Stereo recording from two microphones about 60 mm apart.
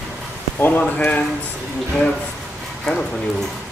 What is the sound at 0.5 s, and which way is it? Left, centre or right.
Speech, left.